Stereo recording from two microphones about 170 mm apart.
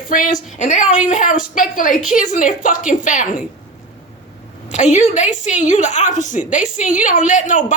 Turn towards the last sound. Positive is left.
turn(degrees=50)  # may be behind; listen again after turning